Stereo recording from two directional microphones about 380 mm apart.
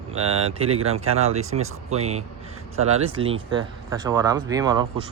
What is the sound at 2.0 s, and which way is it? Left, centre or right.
Speech, centre.